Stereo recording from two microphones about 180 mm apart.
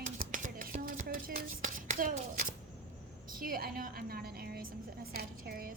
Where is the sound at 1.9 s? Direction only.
50° right (ahead or behind).